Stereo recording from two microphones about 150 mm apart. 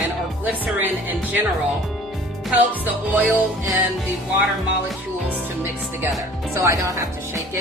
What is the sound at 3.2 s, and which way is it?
Music, 10° right (ahead or behind).